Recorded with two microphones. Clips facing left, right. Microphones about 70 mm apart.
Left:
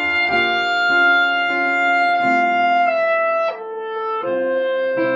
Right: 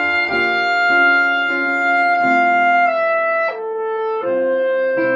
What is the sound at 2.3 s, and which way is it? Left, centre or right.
Music, right.